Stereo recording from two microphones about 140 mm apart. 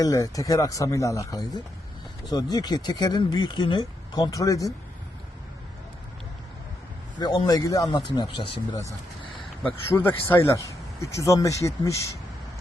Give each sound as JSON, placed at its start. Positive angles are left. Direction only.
{"t": 0.0, "sound": "speech", "side_deg": 25}
{"t": 7.2, "sound": "speech", "side_deg": 30}
{"t": 9.6, "sound": "speech", "side_deg": 15}